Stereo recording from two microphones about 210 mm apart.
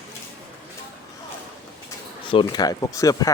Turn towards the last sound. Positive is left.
turn(degrees=15)  # may be behind; listen again after turning